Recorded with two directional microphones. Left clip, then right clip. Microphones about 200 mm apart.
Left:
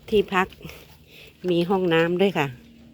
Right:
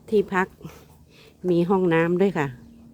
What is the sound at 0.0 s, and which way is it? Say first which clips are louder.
Speech: left 1 dB; 10° right (ahead or behind).